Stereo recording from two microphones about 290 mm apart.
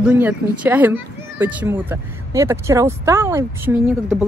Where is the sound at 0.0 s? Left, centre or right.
Centre.